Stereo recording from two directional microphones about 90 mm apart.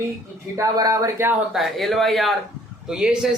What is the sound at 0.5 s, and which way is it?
Speech, 40° right (ahead or behind).